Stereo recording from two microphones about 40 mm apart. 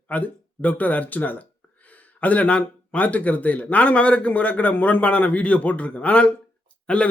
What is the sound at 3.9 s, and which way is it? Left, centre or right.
A man's voice, left.